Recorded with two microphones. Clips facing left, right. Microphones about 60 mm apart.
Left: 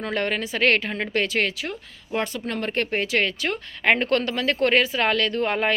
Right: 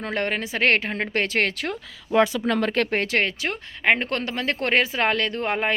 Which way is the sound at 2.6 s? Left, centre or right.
Right.